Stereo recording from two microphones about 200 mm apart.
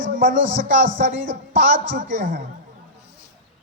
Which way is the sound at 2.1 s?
40° right (ahead or behind).